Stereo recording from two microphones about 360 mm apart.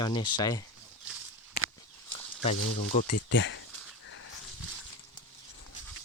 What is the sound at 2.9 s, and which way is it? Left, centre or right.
Speech, left.